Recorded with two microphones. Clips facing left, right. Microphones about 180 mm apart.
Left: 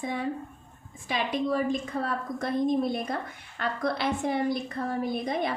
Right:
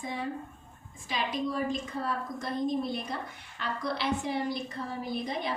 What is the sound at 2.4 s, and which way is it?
A woman's voice, 55° left (ahead or behind).